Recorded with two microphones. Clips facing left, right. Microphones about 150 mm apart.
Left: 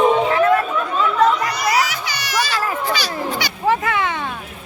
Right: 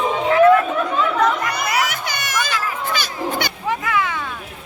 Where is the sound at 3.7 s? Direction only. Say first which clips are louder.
Left 3 dB; 25° left (ahead or behind).